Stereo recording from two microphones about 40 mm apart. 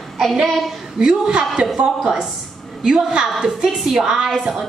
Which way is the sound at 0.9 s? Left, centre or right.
Centre.